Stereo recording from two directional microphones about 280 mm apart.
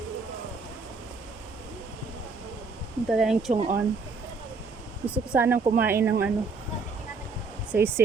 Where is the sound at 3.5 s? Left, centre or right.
Right.